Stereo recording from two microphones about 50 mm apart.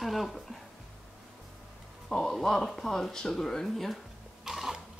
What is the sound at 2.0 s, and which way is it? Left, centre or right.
Speech, centre.